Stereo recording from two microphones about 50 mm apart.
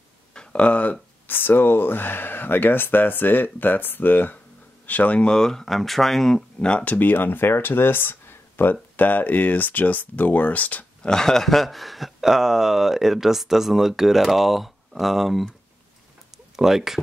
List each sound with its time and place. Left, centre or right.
0.3 s a sound: centre
1.2 s speech: left
5.2 s speech: centre
6.6 s speech: left
11.0 s speech: centre
16.5 s speech: centre